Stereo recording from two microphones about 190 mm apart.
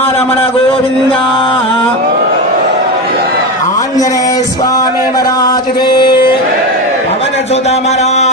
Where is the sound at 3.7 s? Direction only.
20° left (ahead or behind).